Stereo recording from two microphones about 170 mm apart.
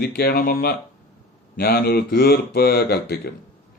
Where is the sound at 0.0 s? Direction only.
65° left (ahead or behind).